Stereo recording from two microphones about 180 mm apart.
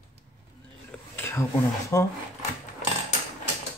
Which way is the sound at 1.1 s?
10° left (ahead or behind).